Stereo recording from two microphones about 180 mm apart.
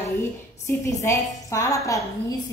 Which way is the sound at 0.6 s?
15° left (ahead or behind).